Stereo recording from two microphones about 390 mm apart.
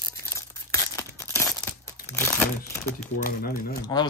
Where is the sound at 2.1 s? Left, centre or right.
Centre.